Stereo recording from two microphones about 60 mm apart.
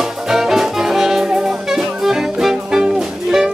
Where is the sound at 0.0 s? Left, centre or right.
Centre.